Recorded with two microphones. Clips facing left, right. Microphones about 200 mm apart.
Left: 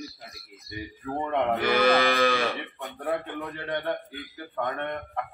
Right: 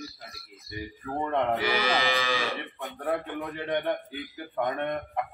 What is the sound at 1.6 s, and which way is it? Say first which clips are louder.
Moo: left 5 dB; 55° left (ahead or behind).